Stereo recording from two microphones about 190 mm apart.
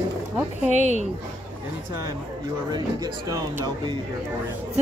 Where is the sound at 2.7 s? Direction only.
20° right (ahead or behind).